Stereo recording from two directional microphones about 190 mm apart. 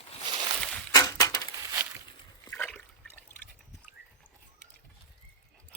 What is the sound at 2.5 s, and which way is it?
Water, 10° left (ahead or behind).